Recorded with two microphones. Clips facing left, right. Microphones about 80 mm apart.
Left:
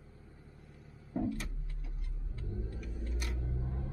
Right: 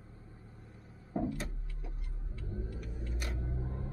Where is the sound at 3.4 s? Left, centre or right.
Right.